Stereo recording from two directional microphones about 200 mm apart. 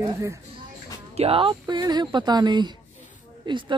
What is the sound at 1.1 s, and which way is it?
Speech, 30° right (ahead or behind).